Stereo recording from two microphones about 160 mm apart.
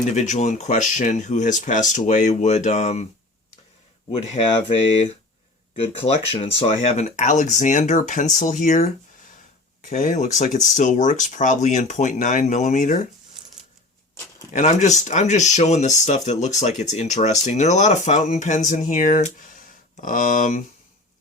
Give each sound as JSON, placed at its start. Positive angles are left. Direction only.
{"t": 0.1, "sound": "speech", "side_deg": 50}
{"t": 4.1, "sound": "speech", "side_deg": 35}
{"t": 5.8, "sound": "speech", "side_deg": 40}
{"t": 14.5, "sound": "speech", "side_deg": 50}